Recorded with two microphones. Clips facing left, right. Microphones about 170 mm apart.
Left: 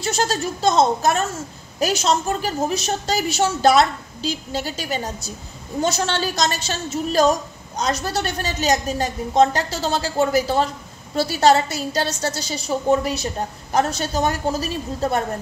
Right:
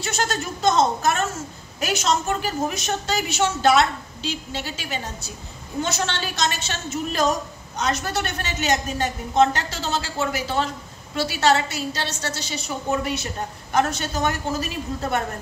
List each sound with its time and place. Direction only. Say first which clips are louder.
0.0 s a woman's voice: left 4 dB; 35° left (ahead or behind)